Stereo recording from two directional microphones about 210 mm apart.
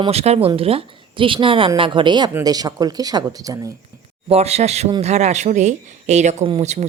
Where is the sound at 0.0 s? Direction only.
30° right (ahead or behind).